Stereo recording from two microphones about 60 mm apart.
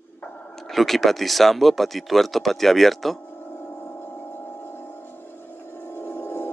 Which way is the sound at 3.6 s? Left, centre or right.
Left.